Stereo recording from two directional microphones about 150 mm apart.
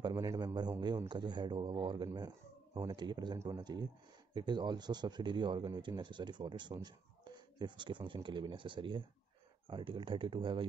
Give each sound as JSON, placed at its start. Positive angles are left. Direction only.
{"t": 0.0, "sound": "a man's voice", "side_deg": -25}